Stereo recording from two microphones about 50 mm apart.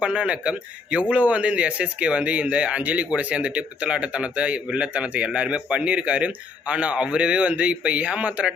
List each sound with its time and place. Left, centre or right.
0.0 s a man's voice: right